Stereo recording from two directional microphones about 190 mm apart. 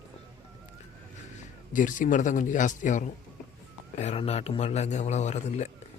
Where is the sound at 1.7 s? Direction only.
45° left (ahead or behind).